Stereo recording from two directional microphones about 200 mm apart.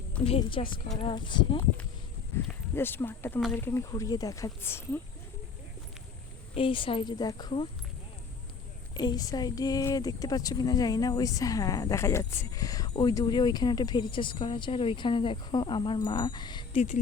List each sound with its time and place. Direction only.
0.3 s speech: 25° left (ahead or behind)
2.3 s speech: 15° left (ahead or behind)
6.5 s speech: 25° left (ahead or behind)
9.0 s speech: 20° left (ahead or behind)